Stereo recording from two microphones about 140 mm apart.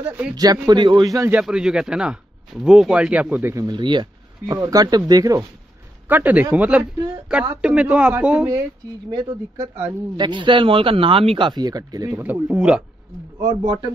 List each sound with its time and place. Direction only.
0.4 s speech: 30° right (ahead or behind)
1.3 s speech: 5° right (ahead or behind)
3.5 s speech: 30° right (ahead or behind)
6.0 s speech: 10° right (ahead or behind)
9.1 s speech: 30° right (ahead or behind)
12.2 s speech: 10° right (ahead or behind)
13.4 s speech: 30° right (ahead or behind)